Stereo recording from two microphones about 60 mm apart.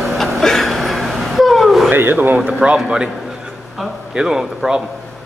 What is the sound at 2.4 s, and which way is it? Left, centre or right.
Speech, centre.